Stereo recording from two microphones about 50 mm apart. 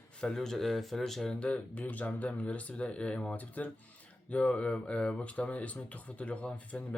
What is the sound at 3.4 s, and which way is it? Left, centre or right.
Speech, left.